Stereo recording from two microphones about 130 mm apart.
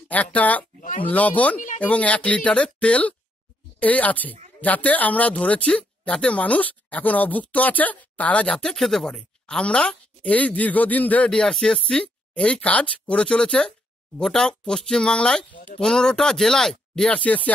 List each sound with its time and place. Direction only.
0.1 s speech: 10° left (ahead or behind)
0.7 s speech: 85° left
1.0 s speech: 10° left (ahead or behind)